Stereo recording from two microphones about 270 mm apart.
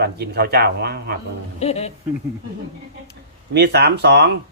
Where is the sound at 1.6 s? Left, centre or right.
Left.